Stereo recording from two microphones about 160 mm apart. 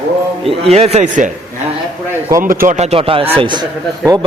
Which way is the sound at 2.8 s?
40° right (ahead or behind).